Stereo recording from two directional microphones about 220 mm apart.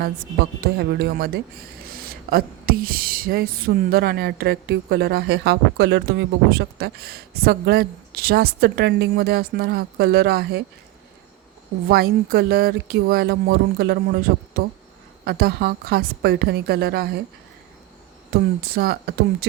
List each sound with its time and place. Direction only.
0.8 s speech: 45° right (ahead or behind)
11.9 s speech: 45° right (ahead or behind)
18.3 s speech: 45° right (ahead or behind)